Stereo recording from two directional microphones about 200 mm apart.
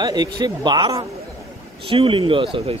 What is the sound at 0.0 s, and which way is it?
Speech, 20° right (ahead or behind).